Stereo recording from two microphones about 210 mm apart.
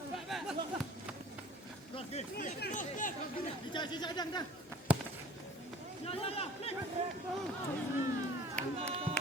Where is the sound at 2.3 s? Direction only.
45° left (ahead or behind).